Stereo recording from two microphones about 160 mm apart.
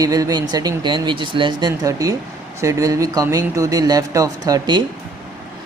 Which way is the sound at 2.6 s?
20° right (ahead or behind).